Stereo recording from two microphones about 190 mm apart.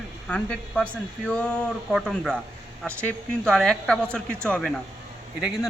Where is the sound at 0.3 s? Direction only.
5° left (ahead or behind).